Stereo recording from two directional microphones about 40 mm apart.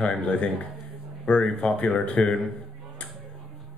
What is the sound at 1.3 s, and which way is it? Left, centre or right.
Speech, left.